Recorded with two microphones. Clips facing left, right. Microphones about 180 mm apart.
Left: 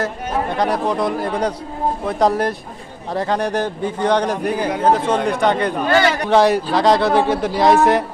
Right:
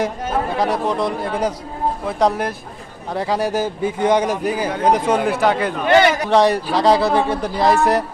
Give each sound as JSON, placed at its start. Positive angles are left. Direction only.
{"t": 0.5, "sound": "a man's voice", "side_deg": 0}
{"t": 5.9, "sound": "a man's voice", "side_deg": -20}
{"t": 6.1, "sound": "a man's voice", "side_deg": -5}